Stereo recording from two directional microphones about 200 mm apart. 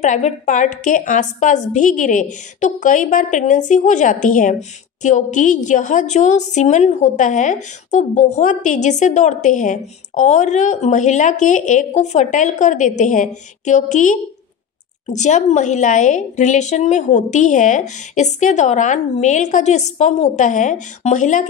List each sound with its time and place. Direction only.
0.0 s a woman's voice: 40° left (ahead or behind)